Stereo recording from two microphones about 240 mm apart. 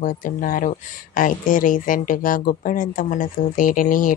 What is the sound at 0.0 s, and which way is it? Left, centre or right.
Speech, left.